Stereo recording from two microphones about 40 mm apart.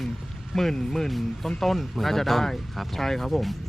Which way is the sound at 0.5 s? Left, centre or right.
Centre.